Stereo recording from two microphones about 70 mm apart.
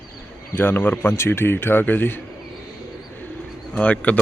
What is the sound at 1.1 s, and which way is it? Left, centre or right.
A man's voice, left.